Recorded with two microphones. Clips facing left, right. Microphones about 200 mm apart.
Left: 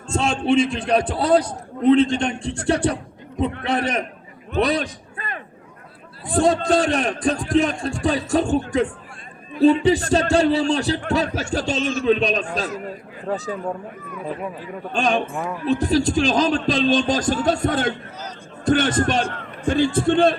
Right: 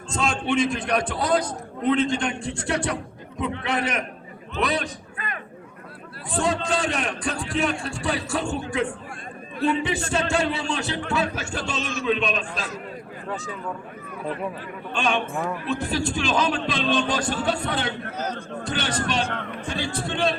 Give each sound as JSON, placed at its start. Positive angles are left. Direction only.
{"t": 0.1, "sound": "a man's voice", "side_deg": 30}
{"t": 4.5, "sound": "a sound", "side_deg": 35}
{"t": 6.4, "sound": "a man's voice", "side_deg": 35}
{"t": 9.6, "sound": "a man's voice", "side_deg": 35}
{"t": 14.9, "sound": "a man's voice", "side_deg": 40}
{"t": 18.0, "sound": "a man's voice", "side_deg": -55}
{"t": 18.6, "sound": "speech", "side_deg": 50}